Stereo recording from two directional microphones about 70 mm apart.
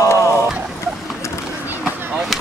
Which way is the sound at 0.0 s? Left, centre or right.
Left.